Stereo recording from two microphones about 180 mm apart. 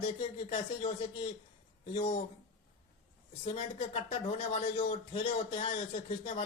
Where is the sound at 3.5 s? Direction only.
30° left (ahead or behind).